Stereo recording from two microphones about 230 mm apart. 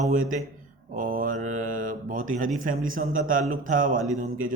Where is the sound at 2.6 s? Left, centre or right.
Right.